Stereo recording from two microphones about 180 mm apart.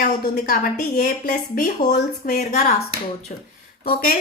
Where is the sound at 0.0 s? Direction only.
50° left (ahead or behind).